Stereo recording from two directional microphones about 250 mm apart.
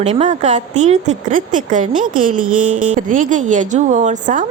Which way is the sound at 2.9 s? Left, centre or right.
Right.